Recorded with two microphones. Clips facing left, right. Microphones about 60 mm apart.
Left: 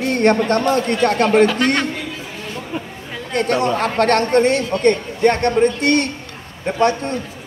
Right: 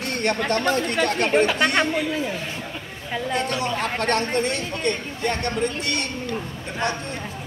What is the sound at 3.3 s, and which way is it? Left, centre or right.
A man's voice, left.